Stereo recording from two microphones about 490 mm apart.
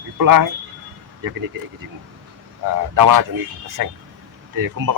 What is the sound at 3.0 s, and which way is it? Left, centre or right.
Speech, right.